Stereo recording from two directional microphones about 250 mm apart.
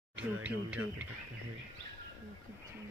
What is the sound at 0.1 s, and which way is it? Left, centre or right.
Speech, centre.